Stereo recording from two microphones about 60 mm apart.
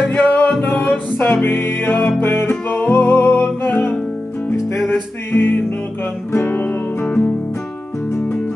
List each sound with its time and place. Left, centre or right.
0.1 s music: left